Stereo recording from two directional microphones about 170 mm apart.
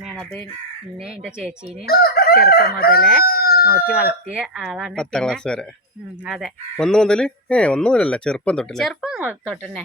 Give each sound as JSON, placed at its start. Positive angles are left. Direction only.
{"t": 0.1, "sound": "speech", "side_deg": 0}
{"t": 1.9, "sound": "chicken", "side_deg": 65}
{"t": 3.2, "sound": "speech", "side_deg": 65}
{"t": 3.7, "sound": "speech", "side_deg": -10}